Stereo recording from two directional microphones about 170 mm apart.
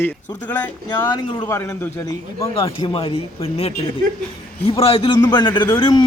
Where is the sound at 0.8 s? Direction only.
25° left (ahead or behind).